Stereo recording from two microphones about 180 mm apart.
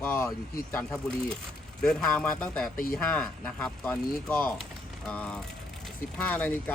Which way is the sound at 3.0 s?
5° left (ahead or behind).